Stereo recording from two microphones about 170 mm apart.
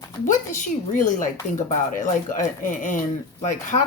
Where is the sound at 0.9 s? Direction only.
50° left (ahead or behind).